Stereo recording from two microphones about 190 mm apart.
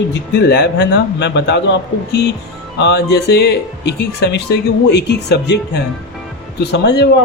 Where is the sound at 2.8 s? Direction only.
60° left (ahead or behind).